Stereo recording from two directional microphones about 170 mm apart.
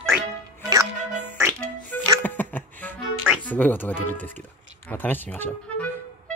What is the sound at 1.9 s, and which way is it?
Music, 10° left (ahead or behind).